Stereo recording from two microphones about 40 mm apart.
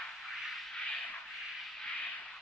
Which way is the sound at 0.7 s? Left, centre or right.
Left.